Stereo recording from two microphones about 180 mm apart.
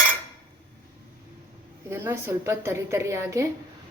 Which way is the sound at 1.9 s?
15° right (ahead or behind).